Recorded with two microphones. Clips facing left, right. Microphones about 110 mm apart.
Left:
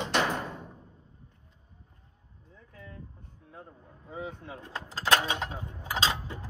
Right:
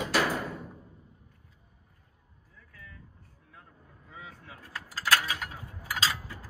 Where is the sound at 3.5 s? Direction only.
30° left (ahead or behind).